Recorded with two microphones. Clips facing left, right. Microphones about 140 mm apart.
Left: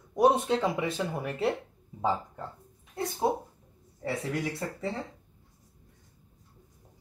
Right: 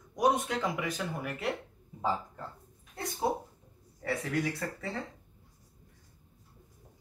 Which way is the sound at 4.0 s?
25° left (ahead or behind).